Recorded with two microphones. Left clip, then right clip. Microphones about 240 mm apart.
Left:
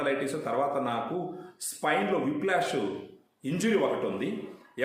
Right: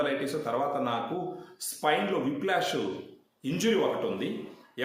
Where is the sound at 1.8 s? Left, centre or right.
Centre.